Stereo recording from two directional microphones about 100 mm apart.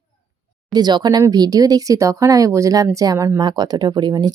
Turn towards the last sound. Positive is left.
turn(degrees=-50)  # may be behind; listen again after turning